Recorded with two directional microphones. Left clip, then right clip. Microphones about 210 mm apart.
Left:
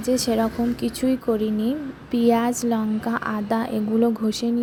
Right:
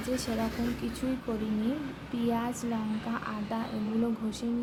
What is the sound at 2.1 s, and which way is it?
A woman's voice, 35° left (ahead or behind).